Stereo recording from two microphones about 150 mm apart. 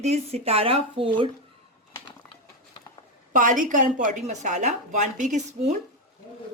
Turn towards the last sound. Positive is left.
turn(degrees=-55)  # may be behind; listen again after turning